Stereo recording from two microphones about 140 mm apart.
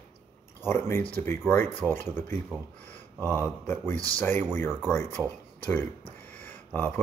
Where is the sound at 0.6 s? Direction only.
15° left (ahead or behind).